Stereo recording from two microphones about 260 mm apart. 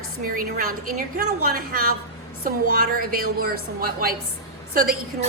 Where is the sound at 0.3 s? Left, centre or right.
Right.